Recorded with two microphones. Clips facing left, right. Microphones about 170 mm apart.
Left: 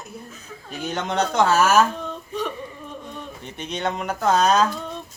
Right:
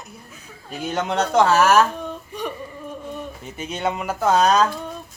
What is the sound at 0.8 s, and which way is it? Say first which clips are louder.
Speech: right 1 dB; 5° right (ahead or behind).